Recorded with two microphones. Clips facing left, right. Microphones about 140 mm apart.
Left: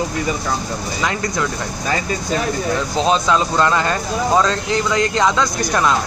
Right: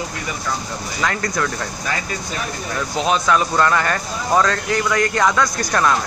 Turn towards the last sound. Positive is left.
turn(degrees=15)  # may be behind; listen again after turning